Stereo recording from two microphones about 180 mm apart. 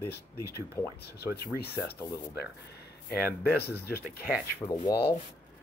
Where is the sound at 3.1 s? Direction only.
60° left (ahead or behind).